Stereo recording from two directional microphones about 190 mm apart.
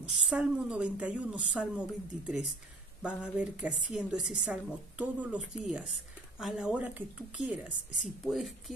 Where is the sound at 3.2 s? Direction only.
5° right (ahead or behind).